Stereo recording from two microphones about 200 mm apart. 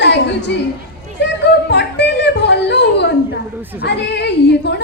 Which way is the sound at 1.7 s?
60° left (ahead or behind).